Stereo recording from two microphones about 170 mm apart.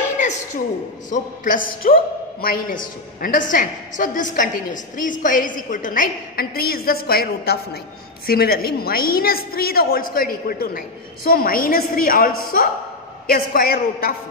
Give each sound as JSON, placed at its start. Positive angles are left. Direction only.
{"t": 1.1, "sound": "a woman's voice", "side_deg": 50}